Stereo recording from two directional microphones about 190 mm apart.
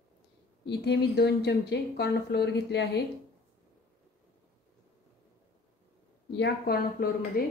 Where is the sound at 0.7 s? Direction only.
60° left (ahead or behind).